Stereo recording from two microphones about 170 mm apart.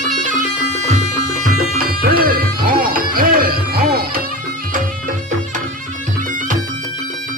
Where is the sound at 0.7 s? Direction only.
45° right (ahead or behind).